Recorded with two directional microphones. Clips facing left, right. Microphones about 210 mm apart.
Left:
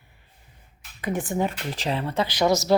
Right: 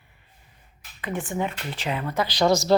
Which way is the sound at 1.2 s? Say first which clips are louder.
Left 2 dB; 35° left (ahead or behind).